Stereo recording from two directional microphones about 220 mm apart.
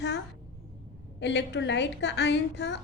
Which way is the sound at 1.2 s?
50° left (ahead or behind).